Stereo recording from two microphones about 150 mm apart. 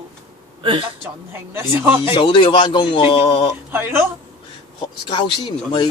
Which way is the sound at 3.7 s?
15° right (ahead or behind).